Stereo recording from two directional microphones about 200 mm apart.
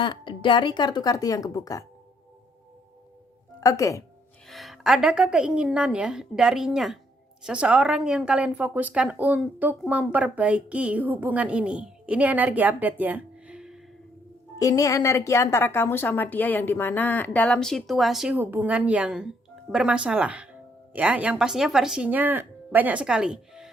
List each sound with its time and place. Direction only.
0.0 s speech: 25° left (ahead or behind)
3.6 s a woman's voice: 15° left (ahead or behind)
4.4 s a woman's voice: centre (ahead or behind)
14.6 s a woman's voice: 15° left (ahead or behind); by 23.6 s 5° right (ahead or behind)